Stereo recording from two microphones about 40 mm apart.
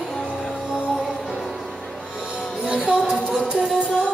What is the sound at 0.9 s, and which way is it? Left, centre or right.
Music, centre.